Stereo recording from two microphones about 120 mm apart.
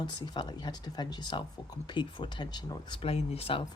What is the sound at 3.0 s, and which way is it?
Speech, 55° left (ahead or behind).